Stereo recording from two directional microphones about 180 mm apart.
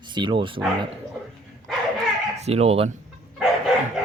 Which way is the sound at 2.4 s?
35° right (ahead or behind).